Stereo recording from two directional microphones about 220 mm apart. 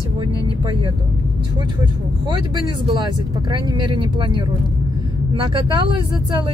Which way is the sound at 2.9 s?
20° right (ahead or behind).